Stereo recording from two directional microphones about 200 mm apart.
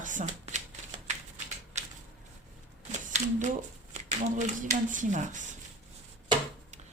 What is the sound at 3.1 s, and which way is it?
Speech, 35° right (ahead or behind).